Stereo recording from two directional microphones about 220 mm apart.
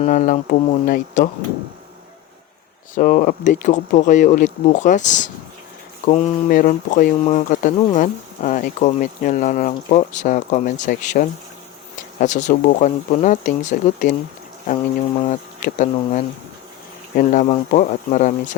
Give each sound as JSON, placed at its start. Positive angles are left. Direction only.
{"t": 0.0, "sound": "speech", "side_deg": 35}
{"t": 2.9, "sound": "speech", "side_deg": 40}
{"t": 15.2, "sound": "speech", "side_deg": 35}
{"t": 17.5, "sound": "speech", "side_deg": 35}